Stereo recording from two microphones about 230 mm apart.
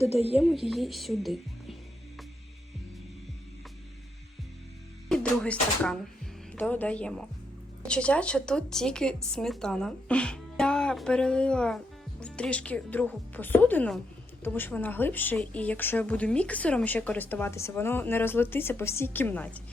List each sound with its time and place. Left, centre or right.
0.0 s a woman's voice: left
0.4 s a woman's voice: centre
5.0 s a woman's voice: centre